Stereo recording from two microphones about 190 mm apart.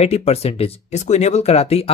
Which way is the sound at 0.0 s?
35° left (ahead or behind).